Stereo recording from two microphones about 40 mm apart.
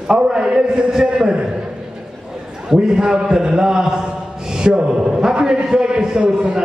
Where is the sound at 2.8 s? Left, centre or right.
Centre.